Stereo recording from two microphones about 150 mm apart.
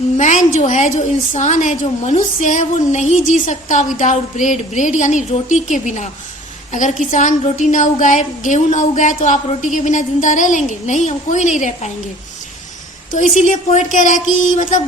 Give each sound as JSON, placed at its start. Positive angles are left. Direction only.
{"t": 0.2, "sound": "a woman's voice", "side_deg": 55}
{"t": 13.1, "sound": "a woman's voice", "side_deg": 55}